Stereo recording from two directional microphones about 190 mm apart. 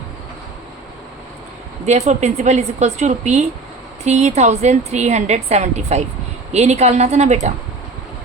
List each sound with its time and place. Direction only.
1.9 s a woman's voice: 35° right (ahead or behind)